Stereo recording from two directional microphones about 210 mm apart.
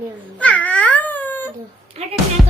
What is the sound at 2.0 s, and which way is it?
Speech, 30° right (ahead or behind).